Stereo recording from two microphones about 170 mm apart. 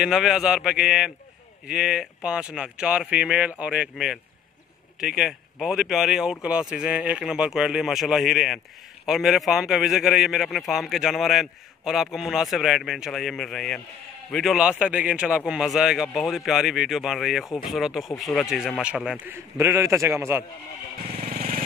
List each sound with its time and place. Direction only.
0.0 s a man's voice: centre (ahead or behind)
21.3 s vehicle: 55° right (ahead or behind)